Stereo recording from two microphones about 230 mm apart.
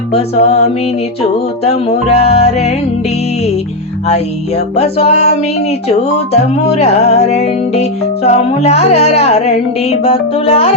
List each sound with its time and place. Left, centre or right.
0.1 s music: left
1.6 s music: left
4.1 s music: left
6.7 s music: left